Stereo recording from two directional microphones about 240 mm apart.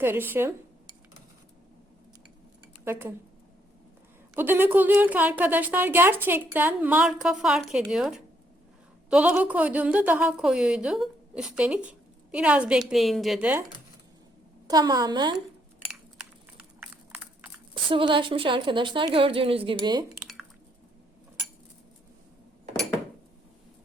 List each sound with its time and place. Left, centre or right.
0.0 s speech: centre
2.8 s speech: centre
4.4 s a woman's voice: centre
14.7 s a woman's voice: centre
16.1 s a sound: centre
17.8 s a woman's voice: right
20.1 s squish: centre